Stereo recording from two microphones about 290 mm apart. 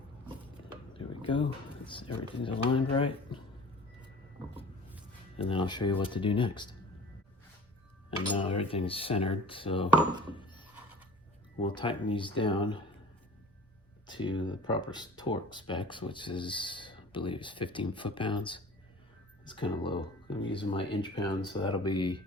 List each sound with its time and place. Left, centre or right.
0.9 s a sound: centre
1.9 s speech: centre
5.4 s speech: centre
8.4 s speech: centre
10.2 s a sound: centre
11.6 s speech: centre
14.1 s speech: centre